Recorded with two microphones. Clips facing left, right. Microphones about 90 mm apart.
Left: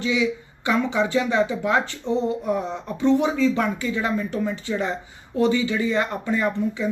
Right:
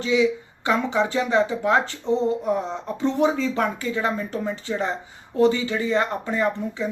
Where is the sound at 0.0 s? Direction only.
35° right (ahead or behind).